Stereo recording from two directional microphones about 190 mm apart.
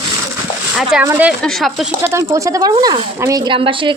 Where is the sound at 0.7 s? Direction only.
5° right (ahead or behind).